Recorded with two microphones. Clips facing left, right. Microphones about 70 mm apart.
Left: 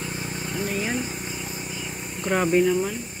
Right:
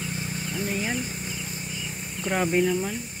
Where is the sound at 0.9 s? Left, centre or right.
Centre.